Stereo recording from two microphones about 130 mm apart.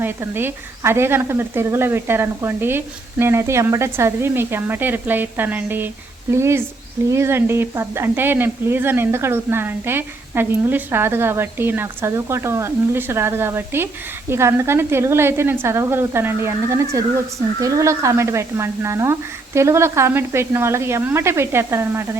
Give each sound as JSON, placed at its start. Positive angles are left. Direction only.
{"t": 0.0, "sound": "a woman's voice", "side_deg": -15}